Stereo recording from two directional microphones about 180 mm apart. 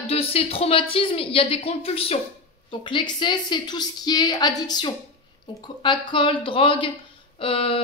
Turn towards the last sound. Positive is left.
turn(degrees=30)  # may be behind; listen again after turning